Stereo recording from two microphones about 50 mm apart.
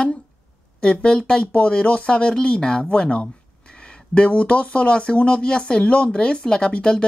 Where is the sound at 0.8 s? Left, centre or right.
Left.